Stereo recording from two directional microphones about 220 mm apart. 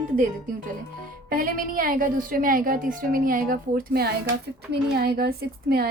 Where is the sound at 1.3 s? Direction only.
40° right (ahead or behind).